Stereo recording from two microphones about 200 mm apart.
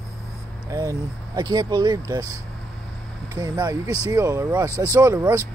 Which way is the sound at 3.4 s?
20° right (ahead or behind).